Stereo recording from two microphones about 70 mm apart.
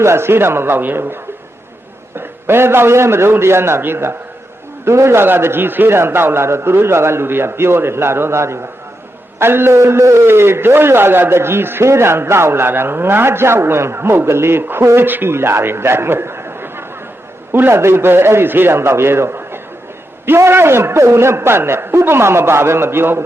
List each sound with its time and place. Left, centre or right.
0.0 s a man's voice: right